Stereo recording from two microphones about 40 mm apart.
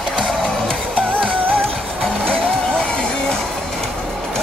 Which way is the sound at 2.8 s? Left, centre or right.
Left.